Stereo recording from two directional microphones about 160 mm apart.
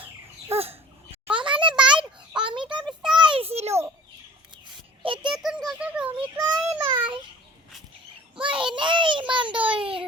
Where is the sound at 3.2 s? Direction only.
35° right (ahead or behind).